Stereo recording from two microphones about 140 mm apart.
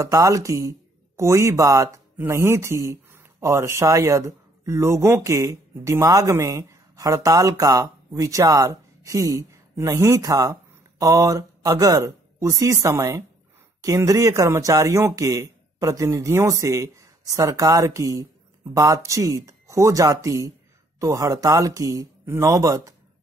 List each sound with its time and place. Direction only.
0.0 s speech: 25° right (ahead or behind)